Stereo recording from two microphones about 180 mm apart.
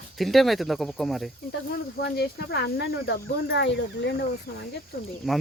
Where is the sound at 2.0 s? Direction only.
60° left (ahead or behind); by 4.1 s 75° left (ahead or behind).